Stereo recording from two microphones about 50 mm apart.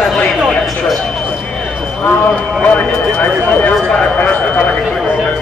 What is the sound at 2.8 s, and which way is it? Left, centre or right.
Speech, left.